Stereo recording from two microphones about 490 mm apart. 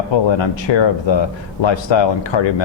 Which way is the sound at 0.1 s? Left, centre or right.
Left.